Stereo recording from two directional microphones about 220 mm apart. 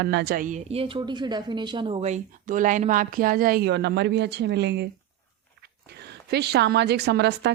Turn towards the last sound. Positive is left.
turn(degrees=-50)  # may be behind; listen again after turning